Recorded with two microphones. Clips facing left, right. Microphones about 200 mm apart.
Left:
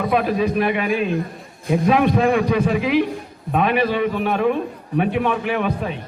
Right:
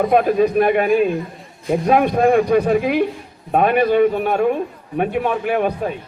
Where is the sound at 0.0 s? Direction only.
45° right (ahead or behind).